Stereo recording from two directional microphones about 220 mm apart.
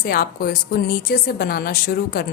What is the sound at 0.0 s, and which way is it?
A woman's voice, 40° left (ahead or behind).